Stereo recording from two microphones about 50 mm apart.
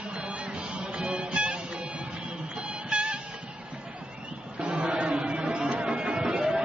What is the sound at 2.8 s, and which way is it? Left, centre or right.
Train, right.